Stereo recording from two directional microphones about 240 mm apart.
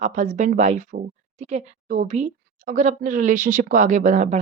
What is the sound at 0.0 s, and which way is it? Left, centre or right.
Speech, right.